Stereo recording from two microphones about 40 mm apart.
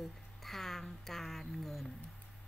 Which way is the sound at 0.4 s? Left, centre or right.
Centre.